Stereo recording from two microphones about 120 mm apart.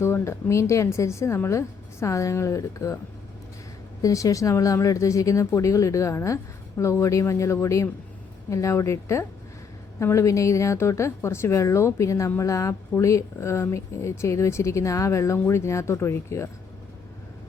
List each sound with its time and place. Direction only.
0.0 s speech: 20° left (ahead or behind)
4.0 s speech: 25° left (ahead or behind)